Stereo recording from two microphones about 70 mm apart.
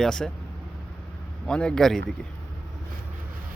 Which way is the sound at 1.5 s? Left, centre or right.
Centre.